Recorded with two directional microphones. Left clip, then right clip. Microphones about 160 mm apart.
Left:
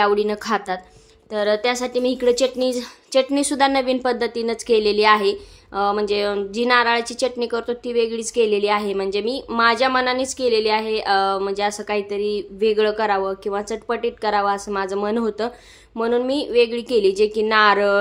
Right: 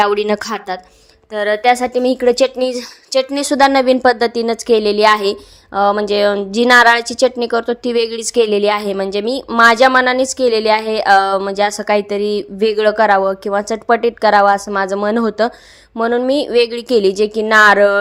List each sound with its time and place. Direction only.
0.0 s a woman's voice: 45° right (ahead or behind)
1.3 s a woman's voice: 20° right (ahead or behind)
7.9 s a woman's voice: 45° right (ahead or behind); by 18.0 s 25° right (ahead or behind)